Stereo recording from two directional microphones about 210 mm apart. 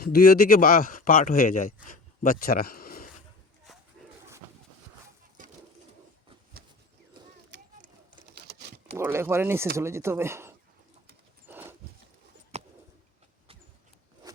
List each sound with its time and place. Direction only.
0.0 s speech: 45° left (ahead or behind)
7.5 s a sound: 55° right (ahead or behind)
9.0 s speech: 10° right (ahead or behind)
11.4 s horse: 10° right (ahead or behind)
12.5 s bird: 30° right (ahead or behind)
14.2 s zipper: 20° right (ahead or behind)